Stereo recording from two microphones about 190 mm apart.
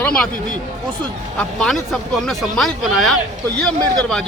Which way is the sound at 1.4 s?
5° left (ahead or behind).